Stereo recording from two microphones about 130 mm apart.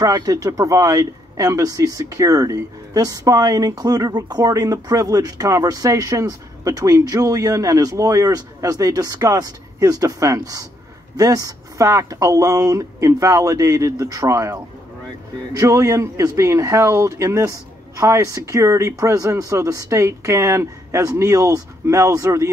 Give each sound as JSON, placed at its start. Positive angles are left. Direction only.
{"t": 0.0, "sound": "speech", "side_deg": -25}